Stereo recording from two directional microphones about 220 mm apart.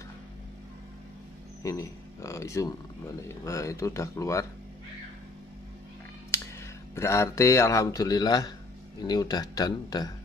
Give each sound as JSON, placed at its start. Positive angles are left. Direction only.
{"t": 1.6, "sound": "speech", "side_deg": 15}
{"t": 6.3, "sound": "a sound", "side_deg": 10}
{"t": 7.0, "sound": "speech", "side_deg": 10}